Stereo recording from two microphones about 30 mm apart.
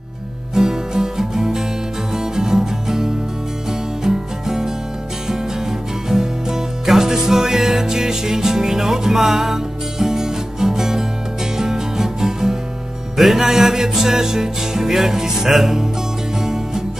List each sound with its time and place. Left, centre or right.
0.6 s music: centre
13.2 s music: centre
16.3 s music: centre